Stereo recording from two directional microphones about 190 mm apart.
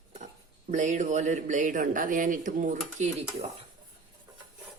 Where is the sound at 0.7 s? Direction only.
40° right (ahead or behind).